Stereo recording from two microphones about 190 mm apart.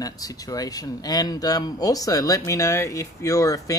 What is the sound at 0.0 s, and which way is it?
Speech, 20° left (ahead or behind).